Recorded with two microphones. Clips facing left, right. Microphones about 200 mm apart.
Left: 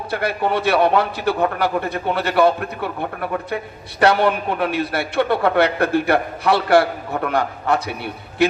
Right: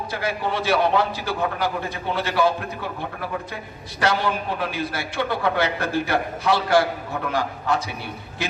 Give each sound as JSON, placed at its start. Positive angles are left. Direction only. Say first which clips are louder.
{"t": 0.1, "sound": "a man's voice", "louder": "left 6 dB", "side_deg": 60}